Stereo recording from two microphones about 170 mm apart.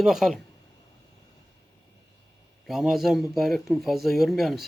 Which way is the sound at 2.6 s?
Centre (ahead or behind).